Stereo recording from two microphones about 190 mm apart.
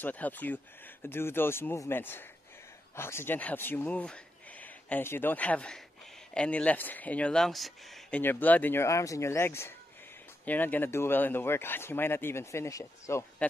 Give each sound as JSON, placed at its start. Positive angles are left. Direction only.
{"t": 0.0, "sound": "speech", "side_deg": 10}